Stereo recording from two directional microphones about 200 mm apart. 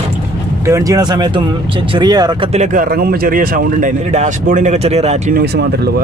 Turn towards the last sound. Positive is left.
turn(degrees=-55)  # may be behind; listen again after turning